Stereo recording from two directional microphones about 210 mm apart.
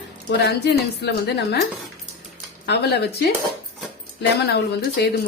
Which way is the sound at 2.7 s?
50° left (ahead or behind).